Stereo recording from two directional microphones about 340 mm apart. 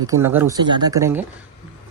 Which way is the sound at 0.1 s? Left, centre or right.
Centre.